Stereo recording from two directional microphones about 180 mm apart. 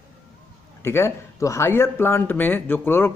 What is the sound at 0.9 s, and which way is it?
Speech, 15° left (ahead or behind).